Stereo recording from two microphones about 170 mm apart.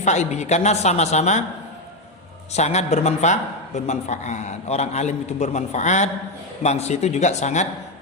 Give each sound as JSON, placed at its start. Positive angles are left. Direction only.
{"t": 0.0, "sound": "a woman's voice", "side_deg": 40}
{"t": 2.5, "sound": "a woman's voice", "side_deg": 40}